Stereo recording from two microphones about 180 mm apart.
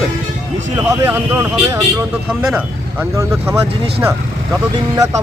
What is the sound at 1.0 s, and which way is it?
Speech, 10° right (ahead or behind).